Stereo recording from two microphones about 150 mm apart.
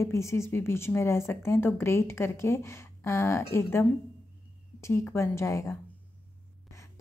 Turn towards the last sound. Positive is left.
turn(degrees=20)  # may be behind; listen again after turning